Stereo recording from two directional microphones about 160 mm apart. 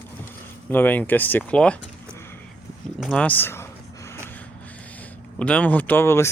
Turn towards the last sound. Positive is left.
turn(degrees=15)  # may be behind; listen again after turning